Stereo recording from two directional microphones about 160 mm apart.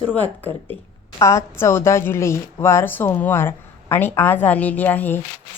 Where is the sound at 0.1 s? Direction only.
10° left (ahead or behind).